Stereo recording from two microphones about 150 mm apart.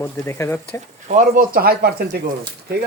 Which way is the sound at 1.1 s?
60° right (ahead or behind).